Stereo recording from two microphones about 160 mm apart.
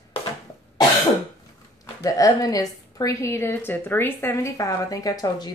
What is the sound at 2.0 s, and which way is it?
A woman's voice, 20° left (ahead or behind).